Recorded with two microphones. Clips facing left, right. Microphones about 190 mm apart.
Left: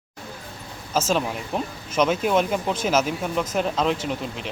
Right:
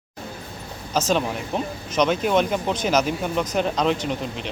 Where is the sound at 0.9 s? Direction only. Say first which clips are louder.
Right 1 dB; 5° left (ahead or behind).